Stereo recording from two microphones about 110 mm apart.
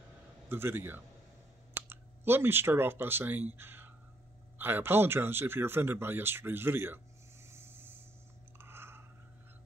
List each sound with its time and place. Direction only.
0.5 s speech: 20° right (ahead or behind)
7.4 s a sound: 20° right (ahead or behind)
8.5 s chewing: 20° right (ahead or behind)